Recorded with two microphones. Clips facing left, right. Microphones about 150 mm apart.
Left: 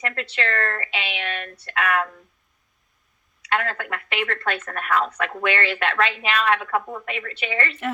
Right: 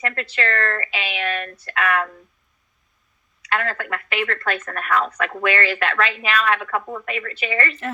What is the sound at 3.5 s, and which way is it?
Speech, centre (ahead or behind).